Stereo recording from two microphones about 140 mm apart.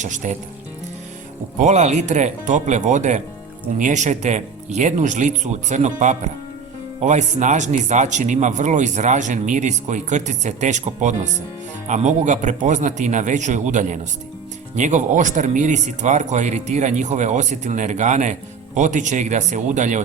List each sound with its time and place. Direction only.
0.0 s speech: 60° right (ahead or behind)
1.5 s speech: 55° right (ahead or behind)